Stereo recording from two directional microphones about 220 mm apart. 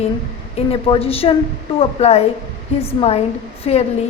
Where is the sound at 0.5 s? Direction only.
25° left (ahead or behind).